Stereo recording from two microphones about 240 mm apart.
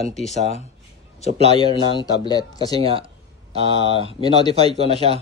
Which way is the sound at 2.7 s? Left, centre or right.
Right.